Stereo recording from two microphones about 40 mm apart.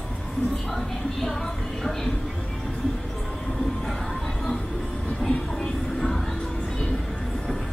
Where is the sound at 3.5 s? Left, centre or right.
Centre.